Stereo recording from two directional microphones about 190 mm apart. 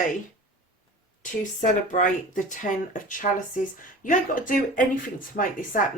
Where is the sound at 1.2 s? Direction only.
45° left (ahead or behind).